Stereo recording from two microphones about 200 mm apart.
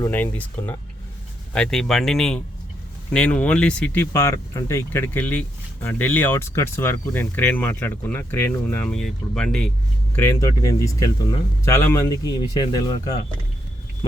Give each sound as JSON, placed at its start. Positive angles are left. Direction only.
{"t": 0.0, "sound": "speech", "side_deg": 10}
{"t": 10.2, "sound": "speech", "side_deg": 15}